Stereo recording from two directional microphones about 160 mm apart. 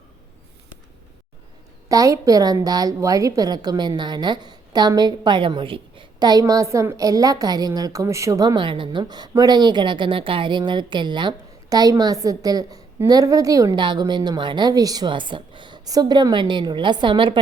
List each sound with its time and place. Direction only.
1.9 s a woman's voice: 20° right (ahead or behind)